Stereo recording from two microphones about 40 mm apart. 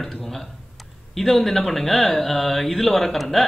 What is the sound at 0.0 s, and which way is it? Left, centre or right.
A man's voice, centre.